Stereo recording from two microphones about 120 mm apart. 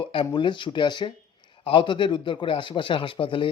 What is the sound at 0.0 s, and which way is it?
A man's voice, 45° left (ahead or behind).